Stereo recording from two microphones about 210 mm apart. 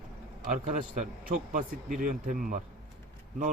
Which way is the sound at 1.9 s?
40° right (ahead or behind).